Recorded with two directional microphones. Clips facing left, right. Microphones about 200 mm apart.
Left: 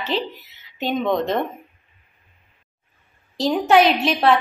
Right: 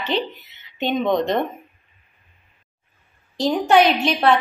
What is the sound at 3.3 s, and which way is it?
A woman's voice, centre (ahead or behind).